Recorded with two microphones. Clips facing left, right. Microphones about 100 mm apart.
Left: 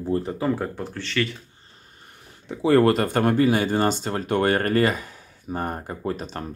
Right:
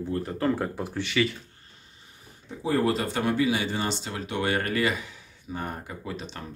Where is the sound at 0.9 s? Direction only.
10° right (ahead or behind).